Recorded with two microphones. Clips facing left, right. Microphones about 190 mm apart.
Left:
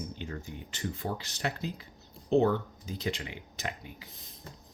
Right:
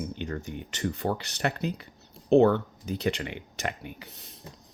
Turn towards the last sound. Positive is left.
turn(degrees=-70)  # may be behind; listen again after turning